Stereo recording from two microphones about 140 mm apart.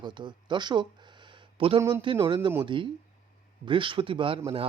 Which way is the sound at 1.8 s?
20° right (ahead or behind).